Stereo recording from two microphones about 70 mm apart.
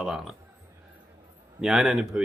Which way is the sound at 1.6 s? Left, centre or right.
Centre.